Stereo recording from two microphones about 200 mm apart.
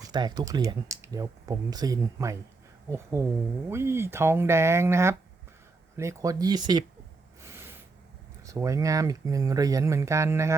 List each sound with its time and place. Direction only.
0.0 s speech: 20° right (ahead or behind)
7.4 s snort: 10° right (ahead or behind)
8.4 s speech: 15° right (ahead or behind)